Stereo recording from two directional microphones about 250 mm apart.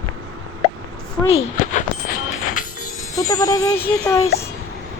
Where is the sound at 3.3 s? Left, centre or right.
Centre.